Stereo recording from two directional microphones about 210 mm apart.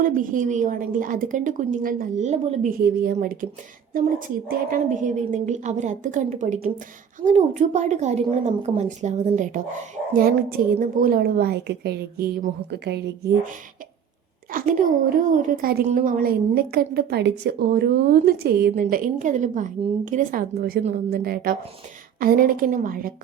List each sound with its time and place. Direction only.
0.0 s a woman's voice: 40° right (ahead or behind)
4.4 s a woman's voice: 40° right (ahead or behind)